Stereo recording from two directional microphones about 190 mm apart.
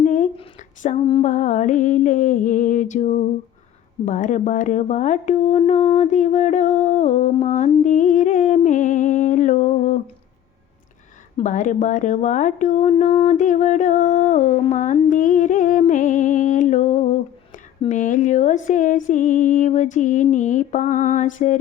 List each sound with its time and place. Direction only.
0.0 s female singing: 40° left (ahead or behind)
4.0 s speech: 40° left (ahead or behind)
11.3 s speech: 40° left (ahead or behind)
17.8 s a sound: 40° left (ahead or behind)